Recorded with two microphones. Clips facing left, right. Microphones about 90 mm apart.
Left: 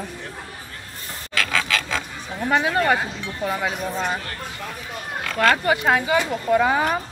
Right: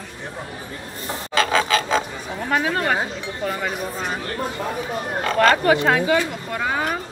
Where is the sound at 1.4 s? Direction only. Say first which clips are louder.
Right 5 dB; 30° right (ahead or behind).